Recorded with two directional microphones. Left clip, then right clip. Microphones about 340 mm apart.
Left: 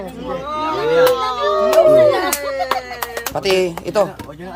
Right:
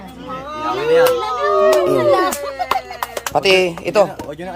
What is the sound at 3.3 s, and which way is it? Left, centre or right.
Speech, centre.